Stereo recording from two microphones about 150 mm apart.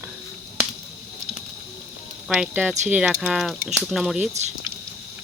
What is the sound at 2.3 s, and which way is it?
Speech, 5° right (ahead or behind).